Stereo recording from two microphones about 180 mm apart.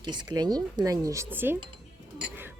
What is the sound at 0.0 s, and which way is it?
Speech, 25° right (ahead or behind).